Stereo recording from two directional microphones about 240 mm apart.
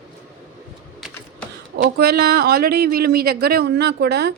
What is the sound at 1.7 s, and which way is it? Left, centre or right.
Speech, right.